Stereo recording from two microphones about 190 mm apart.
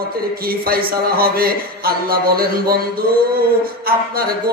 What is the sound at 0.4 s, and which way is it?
A man's voice, 50° right (ahead or behind).